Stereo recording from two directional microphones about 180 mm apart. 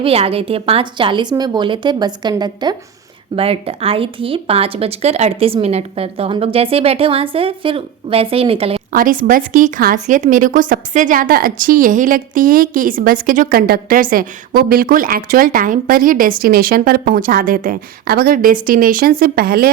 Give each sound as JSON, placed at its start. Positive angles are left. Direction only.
{"t": 0.0, "sound": "a woman's voice", "side_deg": -30}
{"t": 8.9, "sound": "a woman's voice", "side_deg": -50}